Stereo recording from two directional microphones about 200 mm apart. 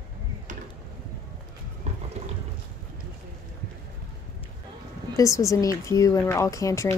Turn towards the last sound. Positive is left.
turn(degrees=15)  # may be behind; listen again after turning